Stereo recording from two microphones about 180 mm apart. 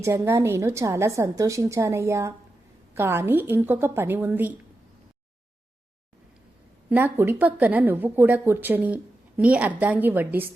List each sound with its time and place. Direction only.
0.0 s a woman's voice: 15° right (ahead or behind)
6.9 s a woman's voice: 10° right (ahead or behind)